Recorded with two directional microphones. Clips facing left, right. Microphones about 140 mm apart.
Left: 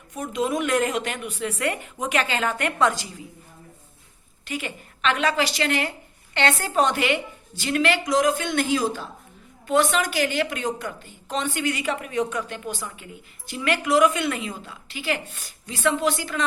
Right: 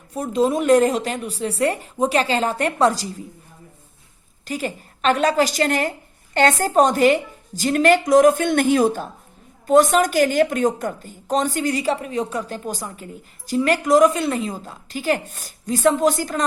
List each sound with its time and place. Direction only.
0.1 s a woman's voice: 35° right (ahead or behind)
4.4 s a woman's voice: 40° right (ahead or behind)